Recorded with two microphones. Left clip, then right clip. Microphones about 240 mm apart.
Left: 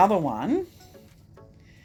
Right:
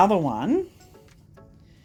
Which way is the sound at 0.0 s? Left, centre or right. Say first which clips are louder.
Right 1 dB; right.